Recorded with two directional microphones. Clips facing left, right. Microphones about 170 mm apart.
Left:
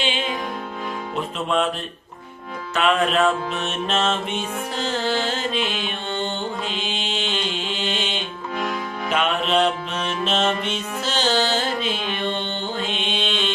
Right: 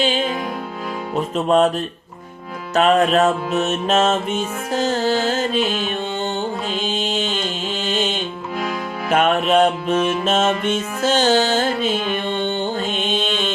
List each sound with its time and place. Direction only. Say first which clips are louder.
0.0 s music: right 5 dB; 40° right (ahead or behind)
2.7 s music: right 5 dB; 40° right (ahead or behind)
7.4 s mantra: right 2 dB; 40° right (ahead or behind)
9.0 s music: right 6 dB; 50° right (ahead or behind)